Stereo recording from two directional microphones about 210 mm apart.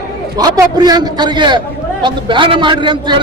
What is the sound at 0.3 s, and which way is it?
A man's voice, 20° right (ahead or behind).